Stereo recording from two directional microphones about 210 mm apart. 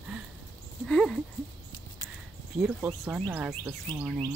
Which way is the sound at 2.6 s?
5° right (ahead or behind).